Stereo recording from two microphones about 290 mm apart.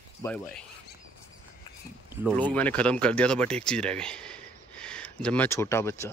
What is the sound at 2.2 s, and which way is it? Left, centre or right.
Speech, centre.